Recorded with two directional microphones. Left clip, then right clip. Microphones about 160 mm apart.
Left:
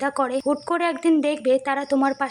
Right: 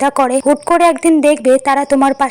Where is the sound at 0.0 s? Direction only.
35° right (ahead or behind).